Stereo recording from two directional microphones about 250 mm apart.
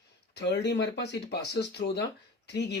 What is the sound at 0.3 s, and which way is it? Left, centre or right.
Speech, left.